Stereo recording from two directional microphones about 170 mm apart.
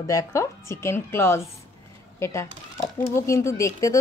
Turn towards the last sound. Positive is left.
turn(degrees=20)  # may be behind; listen again after turning